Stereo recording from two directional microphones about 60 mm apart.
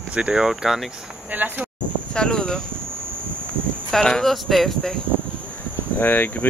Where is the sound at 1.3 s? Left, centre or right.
Right.